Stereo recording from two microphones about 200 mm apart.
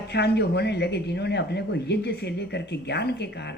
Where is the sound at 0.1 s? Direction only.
55° left (ahead or behind).